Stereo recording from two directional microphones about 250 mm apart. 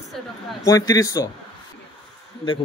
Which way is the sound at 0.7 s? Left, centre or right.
Centre.